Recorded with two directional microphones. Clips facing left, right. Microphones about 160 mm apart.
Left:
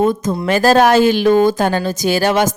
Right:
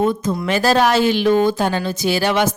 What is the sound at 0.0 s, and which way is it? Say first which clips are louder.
Speech: left 3 dB; 45° left (ahead or behind).